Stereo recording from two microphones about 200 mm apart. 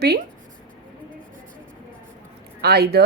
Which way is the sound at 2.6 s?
50° right (ahead or behind).